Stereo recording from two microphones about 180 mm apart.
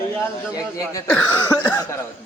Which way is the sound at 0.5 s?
20° left (ahead or behind).